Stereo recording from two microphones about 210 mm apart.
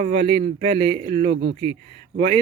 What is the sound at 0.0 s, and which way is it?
Speech, 25° right (ahead or behind).